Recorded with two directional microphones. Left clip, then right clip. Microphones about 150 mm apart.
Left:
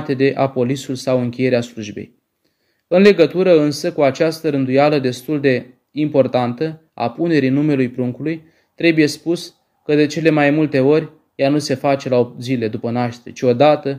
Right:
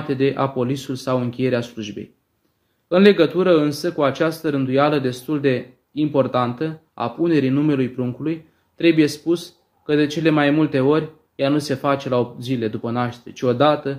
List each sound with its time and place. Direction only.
0.1 s speech: 25° left (ahead or behind)